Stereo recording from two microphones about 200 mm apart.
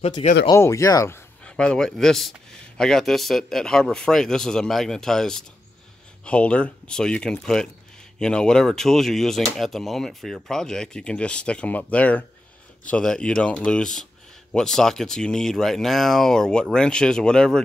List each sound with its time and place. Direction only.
0.0 s speech: 30° left (ahead or behind)
0.5 s a man's voice: 15° left (ahead or behind)